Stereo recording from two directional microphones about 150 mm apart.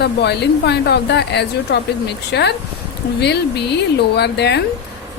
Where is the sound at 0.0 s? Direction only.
90° left.